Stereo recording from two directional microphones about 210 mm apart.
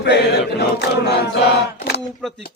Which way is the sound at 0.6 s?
50° left (ahead or behind).